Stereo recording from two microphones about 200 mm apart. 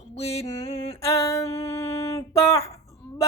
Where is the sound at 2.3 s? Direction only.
30° left (ahead or behind).